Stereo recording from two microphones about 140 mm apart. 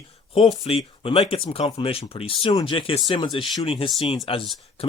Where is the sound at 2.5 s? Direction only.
25° left (ahead or behind).